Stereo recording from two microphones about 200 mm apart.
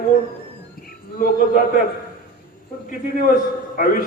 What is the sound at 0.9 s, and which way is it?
Speech, 45° left (ahead or behind).